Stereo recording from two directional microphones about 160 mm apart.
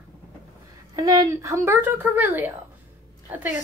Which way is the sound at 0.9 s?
20° right (ahead or behind).